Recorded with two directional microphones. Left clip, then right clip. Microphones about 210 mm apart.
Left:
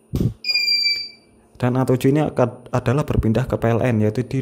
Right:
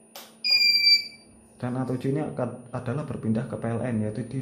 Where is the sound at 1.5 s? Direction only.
50° left (ahead or behind).